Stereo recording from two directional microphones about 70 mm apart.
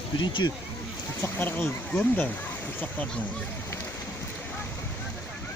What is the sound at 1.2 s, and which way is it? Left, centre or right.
Speech, left.